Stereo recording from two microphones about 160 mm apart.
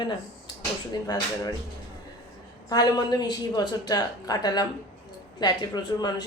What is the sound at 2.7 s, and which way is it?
Speech, 25° left (ahead or behind).